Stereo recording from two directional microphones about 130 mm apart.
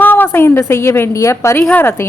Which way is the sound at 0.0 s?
15° left (ahead or behind).